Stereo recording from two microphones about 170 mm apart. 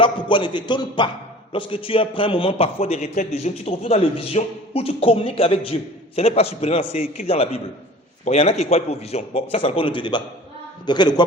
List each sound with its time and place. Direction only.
0.0 s a man's voice: 30° left (ahead or behind)